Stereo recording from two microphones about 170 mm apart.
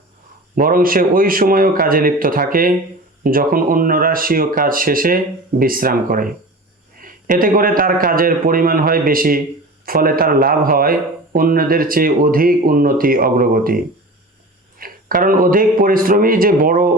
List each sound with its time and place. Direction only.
0.5 s speech: 55° right (ahead or behind)
14.8 s speech: 55° right (ahead or behind)